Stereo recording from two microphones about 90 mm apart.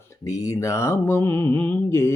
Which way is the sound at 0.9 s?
25° left (ahead or behind).